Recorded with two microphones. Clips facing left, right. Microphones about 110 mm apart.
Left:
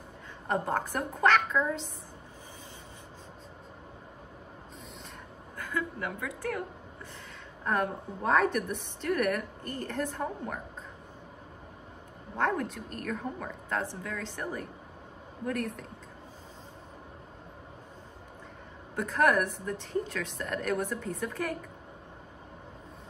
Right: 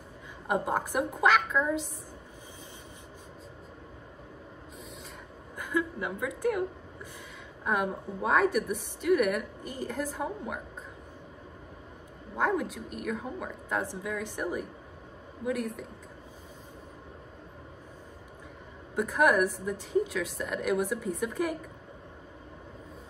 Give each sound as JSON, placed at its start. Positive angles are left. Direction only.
{"t": 0.5, "sound": "a woman's voice", "side_deg": -10}
{"t": 5.6, "sound": "a woman's voice", "side_deg": -15}
{"t": 7.6, "sound": "a woman's voice", "side_deg": -10}
{"t": 12.4, "sound": "a woman's voice", "side_deg": -5}
{"t": 18.9, "sound": "a woman's voice", "side_deg": -10}